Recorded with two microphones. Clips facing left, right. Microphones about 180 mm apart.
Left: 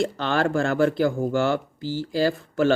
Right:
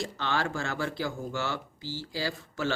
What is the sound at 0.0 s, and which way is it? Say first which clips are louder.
Speech: left 8 dB; 55° left (ahead or behind).